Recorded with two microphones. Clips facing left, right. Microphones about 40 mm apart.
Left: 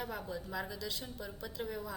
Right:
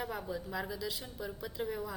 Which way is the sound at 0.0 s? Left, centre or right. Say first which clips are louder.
Right 2 dB; centre.